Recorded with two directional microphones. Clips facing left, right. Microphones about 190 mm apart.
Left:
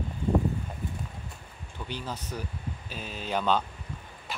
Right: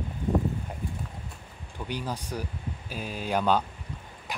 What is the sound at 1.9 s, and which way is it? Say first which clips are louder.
Speech: right 3 dB; 10° right (ahead or behind).